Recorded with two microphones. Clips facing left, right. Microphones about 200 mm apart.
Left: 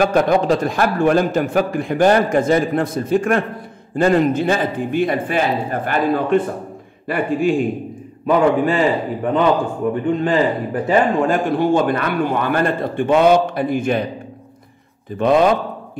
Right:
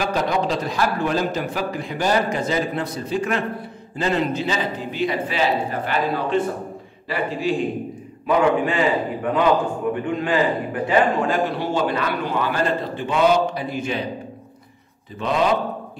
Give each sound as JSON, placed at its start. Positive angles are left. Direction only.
{"t": 0.0, "sound": "a man's voice", "side_deg": 55}
{"t": 8.7, "sound": "a man's voice", "side_deg": 40}
{"t": 15.1, "sound": "a man's voice", "side_deg": 55}